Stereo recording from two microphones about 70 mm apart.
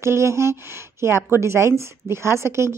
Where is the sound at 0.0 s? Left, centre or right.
Right.